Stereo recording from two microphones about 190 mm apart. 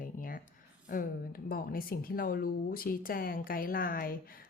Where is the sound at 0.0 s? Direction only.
45° left (ahead or behind).